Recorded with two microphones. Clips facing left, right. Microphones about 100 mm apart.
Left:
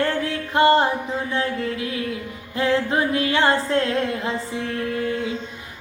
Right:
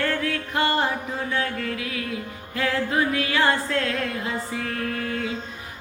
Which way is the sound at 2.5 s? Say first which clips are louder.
Left 3 dB; 30° left (ahead or behind).